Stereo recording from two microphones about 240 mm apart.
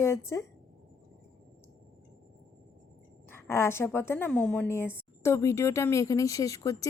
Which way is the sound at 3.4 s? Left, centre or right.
Centre.